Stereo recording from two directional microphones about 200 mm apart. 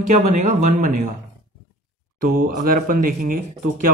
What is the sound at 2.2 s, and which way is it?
Speech, 45° right (ahead or behind).